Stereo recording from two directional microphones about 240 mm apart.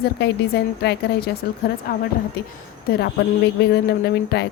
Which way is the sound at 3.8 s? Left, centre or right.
Left.